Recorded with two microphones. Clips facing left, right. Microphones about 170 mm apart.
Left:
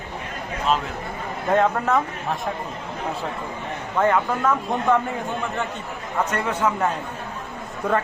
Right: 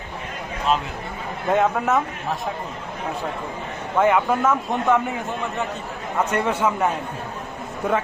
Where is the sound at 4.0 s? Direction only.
5° right (ahead or behind).